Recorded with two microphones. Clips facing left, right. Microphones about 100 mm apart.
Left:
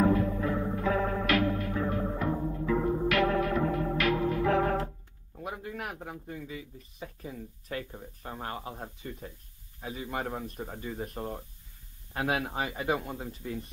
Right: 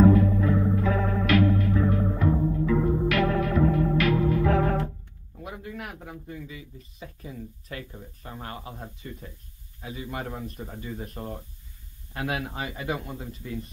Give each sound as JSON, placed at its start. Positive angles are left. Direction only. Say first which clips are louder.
{"t": 0.0, "sound": "music", "louder": "right 6 dB", "side_deg": 10}
{"t": 5.4, "sound": "a sound", "louder": "left 1 dB", "side_deg": 35}
{"t": 5.7, "sound": "a sound", "louder": "right 1 dB", "side_deg": 10}
{"t": 5.9, "sound": "speech", "louder": "right 1 dB", "side_deg": 25}
{"t": 7.7, "sound": "speech", "louder": "left 3 dB", "side_deg": 20}
{"t": 12.5, "sound": "speech", "louder": "left 1 dB", "side_deg": 25}
{"t": 13.0, "sound": "speech", "louder": "even", "side_deg": 15}